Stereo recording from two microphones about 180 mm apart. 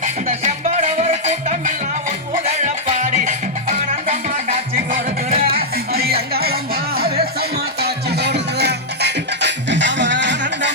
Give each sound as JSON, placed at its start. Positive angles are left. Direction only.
{"t": 0.0, "sound": "music", "side_deg": -40}
{"t": 4.9, "sound": "music", "side_deg": -50}